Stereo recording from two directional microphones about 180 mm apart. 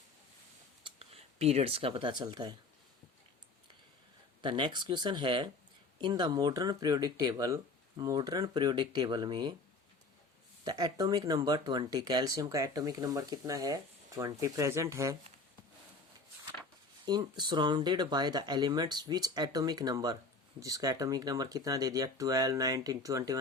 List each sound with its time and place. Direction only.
0.9 s speech: 35° right (ahead or behind)
4.4 s speech: 25° right (ahead or behind)
10.6 s speech: 20° right (ahead or behind)
17.1 s speech: 25° right (ahead or behind)